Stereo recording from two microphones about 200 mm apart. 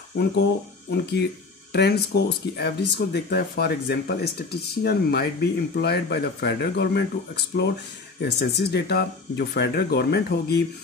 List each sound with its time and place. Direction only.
0.2 s speech: 55° left (ahead or behind)
8.2 s speech: 55° left (ahead or behind)